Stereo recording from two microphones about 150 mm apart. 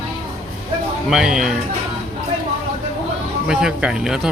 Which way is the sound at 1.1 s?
5° right (ahead or behind).